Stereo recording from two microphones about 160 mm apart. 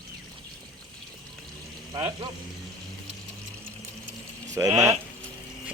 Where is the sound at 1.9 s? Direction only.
20° right (ahead or behind).